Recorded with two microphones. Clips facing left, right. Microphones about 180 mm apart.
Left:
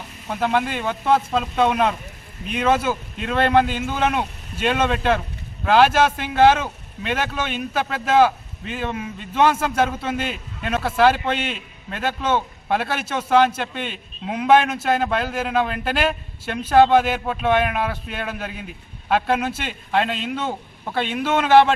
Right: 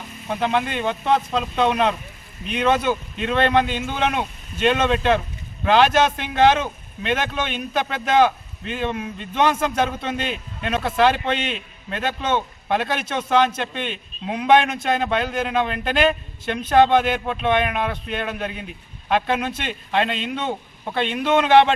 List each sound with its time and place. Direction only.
0.3 s speech: 5° left (ahead or behind)